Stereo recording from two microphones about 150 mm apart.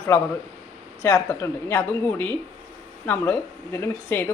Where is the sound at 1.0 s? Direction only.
15° left (ahead or behind).